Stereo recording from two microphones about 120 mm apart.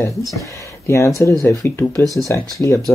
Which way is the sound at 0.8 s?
25° left (ahead or behind).